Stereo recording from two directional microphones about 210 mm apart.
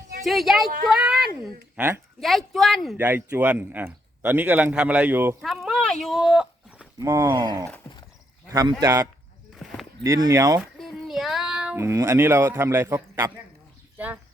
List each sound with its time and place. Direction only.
0.3 s speech: centre (ahead or behind)
8.8 s speech: 10° right (ahead or behind)
9.6 s a sound: centre (ahead or behind)
10.0 s speech: 15° right (ahead or behind)
10.6 s speech: centre (ahead or behind)